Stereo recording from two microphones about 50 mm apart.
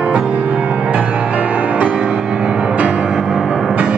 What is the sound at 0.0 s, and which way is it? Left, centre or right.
Music, right.